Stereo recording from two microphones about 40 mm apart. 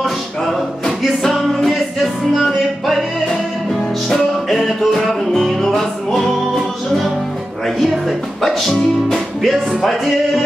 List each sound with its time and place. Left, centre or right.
0.6 s music: centre
4.5 s music: centre